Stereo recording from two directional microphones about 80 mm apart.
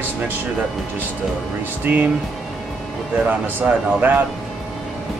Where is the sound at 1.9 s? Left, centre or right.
Right.